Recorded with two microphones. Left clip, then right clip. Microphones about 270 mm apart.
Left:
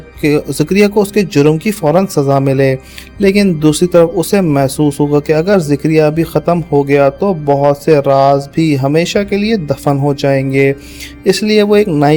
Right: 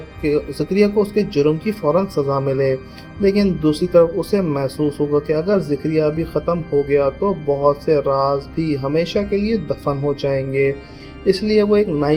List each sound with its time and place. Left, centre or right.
0.2 s speech: left